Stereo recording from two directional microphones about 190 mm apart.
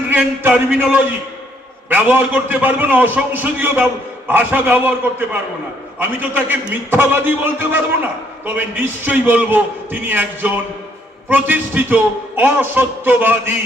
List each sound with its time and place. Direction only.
0.1 s a man's voice: 10° right (ahead or behind)